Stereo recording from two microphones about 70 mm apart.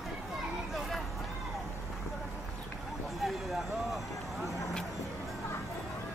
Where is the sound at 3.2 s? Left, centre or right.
Centre.